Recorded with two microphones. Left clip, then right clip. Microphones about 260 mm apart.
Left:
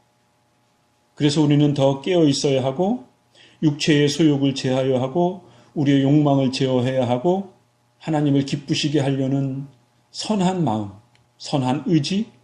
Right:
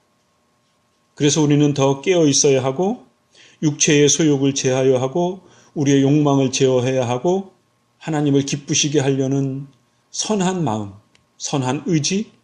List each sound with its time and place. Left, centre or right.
1.1 s a man's voice: right